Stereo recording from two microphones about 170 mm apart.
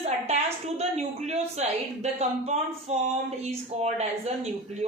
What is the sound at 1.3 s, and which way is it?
A man's voice, 40° right (ahead or behind).